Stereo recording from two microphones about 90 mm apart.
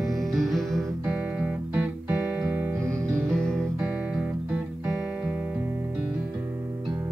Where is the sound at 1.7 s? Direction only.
20° right (ahead or behind).